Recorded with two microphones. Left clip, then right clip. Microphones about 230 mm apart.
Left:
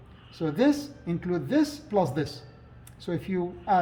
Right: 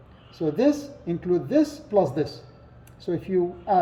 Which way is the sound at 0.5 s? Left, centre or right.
Left.